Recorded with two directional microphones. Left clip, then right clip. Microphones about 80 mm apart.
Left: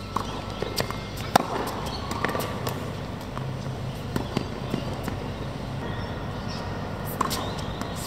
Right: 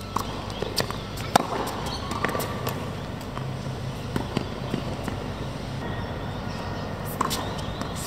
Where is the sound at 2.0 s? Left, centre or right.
Centre.